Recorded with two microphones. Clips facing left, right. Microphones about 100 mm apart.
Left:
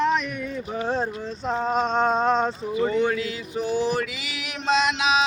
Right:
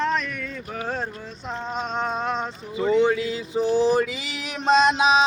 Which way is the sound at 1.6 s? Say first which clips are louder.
Left 5 dB; 40° left (ahead or behind).